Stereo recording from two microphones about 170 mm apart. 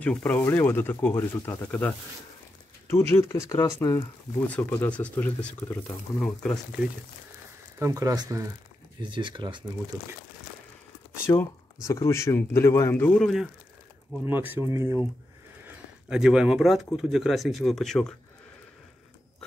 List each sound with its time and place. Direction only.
0.0 s speech: 10° left (ahead or behind)
7.8 s speech: 20° right (ahead or behind)
11.3 s speech: 20° left (ahead or behind); by 13.5 s centre (ahead or behind)
14.2 s speech: 10° right (ahead or behind)
15.6 s speech: 5° right (ahead or behind)